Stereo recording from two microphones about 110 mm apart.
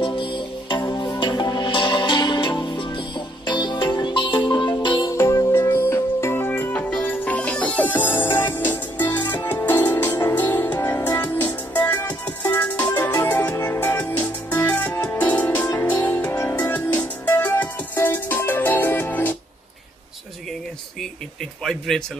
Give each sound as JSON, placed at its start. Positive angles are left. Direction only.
{"t": 0.0, "sound": "music", "side_deg": 50}
{"t": 5.1, "sound": "music", "side_deg": 25}
{"t": 21.6, "sound": "a sound", "side_deg": 5}